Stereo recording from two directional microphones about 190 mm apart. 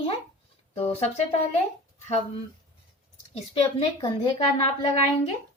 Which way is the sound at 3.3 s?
30° left (ahead or behind).